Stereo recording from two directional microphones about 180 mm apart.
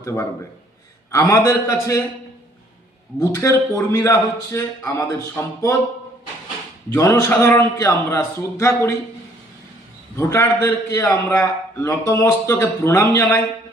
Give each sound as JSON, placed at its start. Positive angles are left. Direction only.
{"t": 0.0, "sound": "a man's voice", "side_deg": 15}
{"t": 3.2, "sound": "a man's voice", "side_deg": 15}
{"t": 6.9, "sound": "a man's voice", "side_deg": 15}
{"t": 10.2, "sound": "a man's voice", "side_deg": 15}